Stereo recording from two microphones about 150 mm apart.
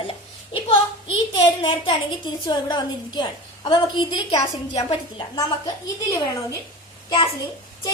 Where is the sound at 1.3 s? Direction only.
35° left (ahead or behind).